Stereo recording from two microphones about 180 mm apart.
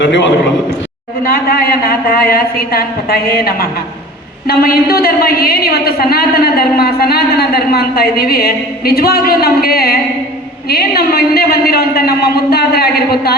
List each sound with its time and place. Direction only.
0.0 s a man's voice: 90° left
1.2 s a woman's voice: 55° left (ahead or behind)